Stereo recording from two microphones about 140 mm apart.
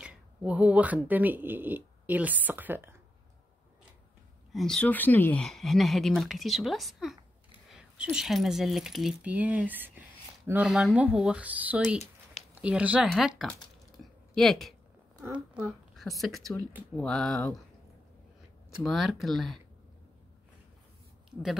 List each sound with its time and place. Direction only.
0.0 s speech: 10° right (ahead or behind)
4.5 s speech: centre (ahead or behind)
15.2 s speech: 15° right (ahead or behind)
16.2 s speech: centre (ahead or behind)
18.8 s speech: centre (ahead or behind)
21.3 s speech: 5° right (ahead or behind)